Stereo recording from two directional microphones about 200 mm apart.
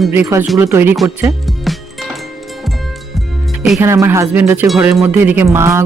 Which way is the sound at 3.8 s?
15° right (ahead or behind).